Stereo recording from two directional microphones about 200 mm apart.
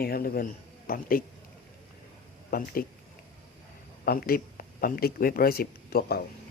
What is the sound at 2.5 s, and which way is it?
Speech, 45° left (ahead or behind).